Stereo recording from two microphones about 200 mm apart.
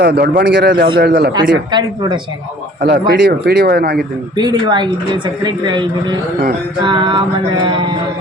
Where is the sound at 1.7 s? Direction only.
20° right (ahead or behind).